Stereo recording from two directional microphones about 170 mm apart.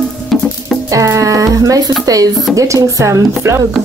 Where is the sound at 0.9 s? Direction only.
20° right (ahead or behind).